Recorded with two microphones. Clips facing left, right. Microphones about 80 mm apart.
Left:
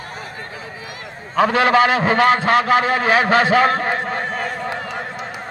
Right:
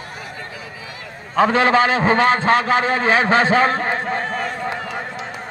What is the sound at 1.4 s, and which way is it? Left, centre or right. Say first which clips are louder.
A man's voice: even; right.